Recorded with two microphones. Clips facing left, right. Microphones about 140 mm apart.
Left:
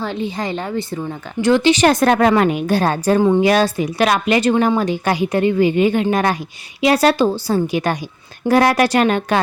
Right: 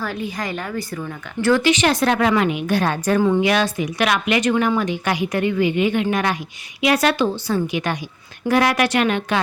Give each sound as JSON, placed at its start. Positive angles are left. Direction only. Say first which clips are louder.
{"t": 0.0, "sound": "a woman's voice", "louder": "left 4 dB", "side_deg": 25}
{"t": 1.7, "sound": "a woman's voice", "louder": "left 4 dB", "side_deg": 45}
{"t": 3.2, "sound": "a woman's voice", "louder": "left 3 dB", "side_deg": 25}
{"t": 3.4, "sound": "a woman's voice", "louder": "left 4 dB", "side_deg": 35}